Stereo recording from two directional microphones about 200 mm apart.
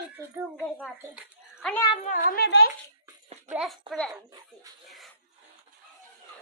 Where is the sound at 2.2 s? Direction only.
50° left (ahead or behind).